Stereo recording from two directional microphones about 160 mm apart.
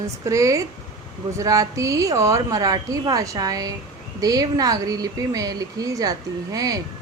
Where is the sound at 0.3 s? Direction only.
20° right (ahead or behind).